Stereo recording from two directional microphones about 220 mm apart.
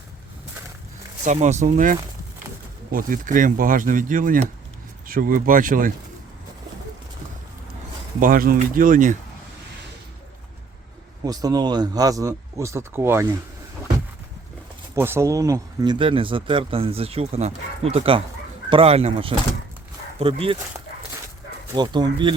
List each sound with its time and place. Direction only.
1.2 s speech: 35° right (ahead or behind)
8.2 s speech: 40° right (ahead or behind)
11.2 s speech: 15° right (ahead or behind)
14.9 s speech: 10° right (ahead or behind); by 20.6 s 25° right (ahead or behind)
21.8 s speech: 20° right (ahead or behind)